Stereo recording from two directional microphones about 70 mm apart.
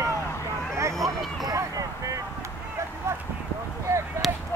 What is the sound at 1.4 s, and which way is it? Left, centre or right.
Vehicle, right.